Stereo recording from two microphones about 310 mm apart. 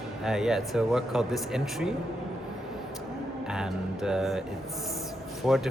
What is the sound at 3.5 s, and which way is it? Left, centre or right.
Speech, centre.